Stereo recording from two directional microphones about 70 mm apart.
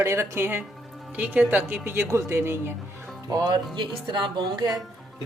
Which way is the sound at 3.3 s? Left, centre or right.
Right.